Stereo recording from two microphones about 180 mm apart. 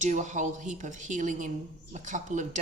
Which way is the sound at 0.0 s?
40° right (ahead or behind).